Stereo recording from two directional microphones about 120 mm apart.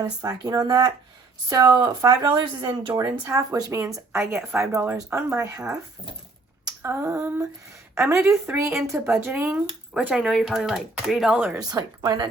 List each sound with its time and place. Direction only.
0.0 s speech: 30° right (ahead or behind)
6.7 s a sound: 20° right (ahead or behind)
7.9 s speech: 20° right (ahead or behind)
11.5 s speech: 30° right (ahead or behind)